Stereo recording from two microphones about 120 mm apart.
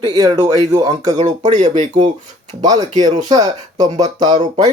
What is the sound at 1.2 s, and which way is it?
Speech, 90° right.